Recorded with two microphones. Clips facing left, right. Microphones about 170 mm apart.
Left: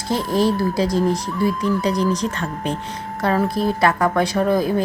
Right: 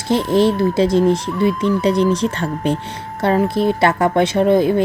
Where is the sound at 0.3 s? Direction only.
25° right (ahead or behind).